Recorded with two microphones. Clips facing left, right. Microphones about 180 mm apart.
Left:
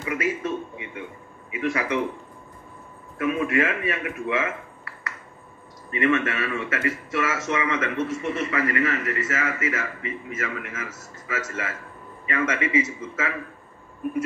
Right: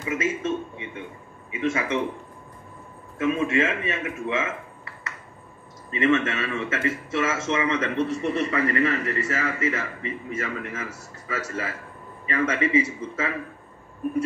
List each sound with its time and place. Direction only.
0.0 s a man's voice: 20° right (ahead or behind)
3.2 s speech: 25° right (ahead or behind)